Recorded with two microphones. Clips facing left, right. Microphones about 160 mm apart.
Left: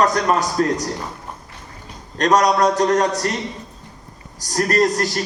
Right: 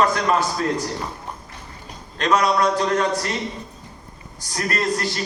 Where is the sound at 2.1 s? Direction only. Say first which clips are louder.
Left 3 dB; 40° left (ahead or behind).